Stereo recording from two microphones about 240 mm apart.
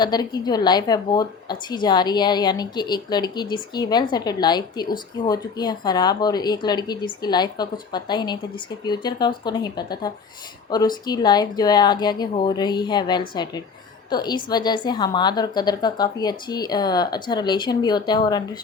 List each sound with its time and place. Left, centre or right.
0.0 s a woman's voice: centre